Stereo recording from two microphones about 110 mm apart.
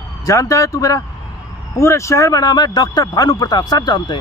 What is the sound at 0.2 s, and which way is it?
Speech, 30° left (ahead or behind).